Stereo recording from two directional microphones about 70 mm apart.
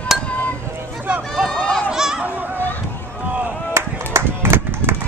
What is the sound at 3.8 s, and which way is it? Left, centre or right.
Music, right.